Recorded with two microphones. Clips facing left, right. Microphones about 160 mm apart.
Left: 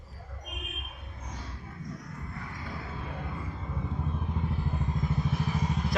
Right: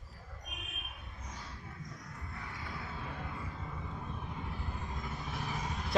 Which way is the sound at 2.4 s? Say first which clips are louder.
Left 2 dB; 20° left (ahead or behind).